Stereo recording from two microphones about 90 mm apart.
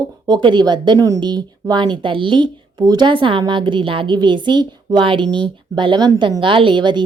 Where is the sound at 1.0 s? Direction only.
40° right (ahead or behind).